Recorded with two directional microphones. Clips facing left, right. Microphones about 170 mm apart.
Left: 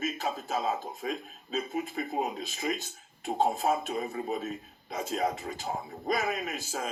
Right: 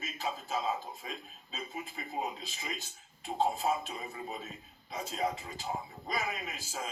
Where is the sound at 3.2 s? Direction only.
45° left (ahead or behind).